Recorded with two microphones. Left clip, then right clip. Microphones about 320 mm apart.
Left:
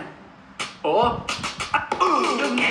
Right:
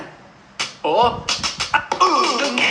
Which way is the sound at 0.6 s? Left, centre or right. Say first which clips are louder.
Right 4 dB; centre.